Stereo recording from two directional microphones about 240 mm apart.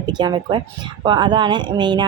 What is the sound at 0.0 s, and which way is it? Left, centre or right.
A woman's voice, centre.